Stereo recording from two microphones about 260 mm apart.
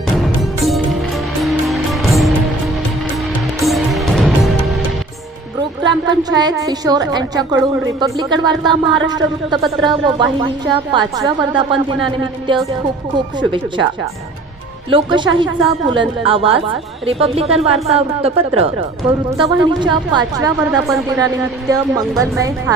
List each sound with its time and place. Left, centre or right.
1.4 s music: centre
3.6 s music: centre
5.6 s a woman's voice: centre
14.9 s a woman's voice: centre